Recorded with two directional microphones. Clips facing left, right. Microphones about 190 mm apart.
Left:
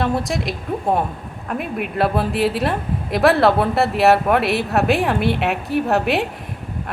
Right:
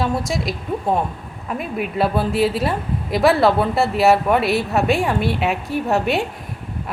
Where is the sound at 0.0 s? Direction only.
Centre (ahead or behind).